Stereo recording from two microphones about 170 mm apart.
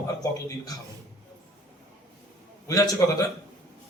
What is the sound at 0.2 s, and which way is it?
Speech, 20° left (ahead or behind).